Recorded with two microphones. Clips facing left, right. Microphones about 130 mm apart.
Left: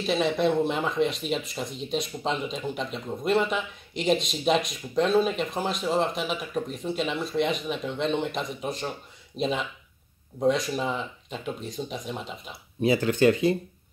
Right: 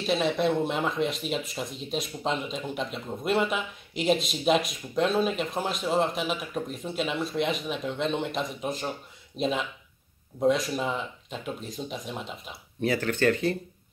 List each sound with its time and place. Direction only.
0.0 s speech: centre (ahead or behind)
12.8 s speech: 15° left (ahead or behind)